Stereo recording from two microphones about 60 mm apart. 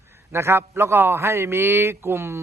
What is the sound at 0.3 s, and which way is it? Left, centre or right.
A man's voice, right.